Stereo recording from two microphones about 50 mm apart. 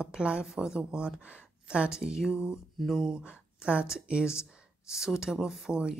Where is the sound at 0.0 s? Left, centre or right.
Centre.